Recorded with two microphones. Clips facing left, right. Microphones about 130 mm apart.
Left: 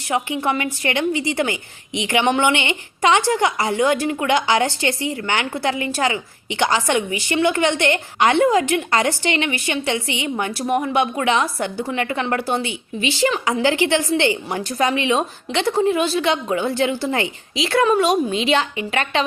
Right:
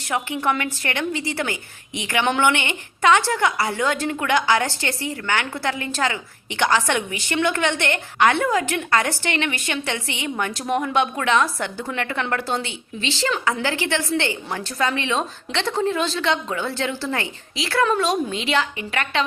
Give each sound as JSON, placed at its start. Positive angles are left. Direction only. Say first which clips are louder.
{"t": 0.1, "sound": "a woman's voice", "louder": "left 2 dB", "side_deg": 15}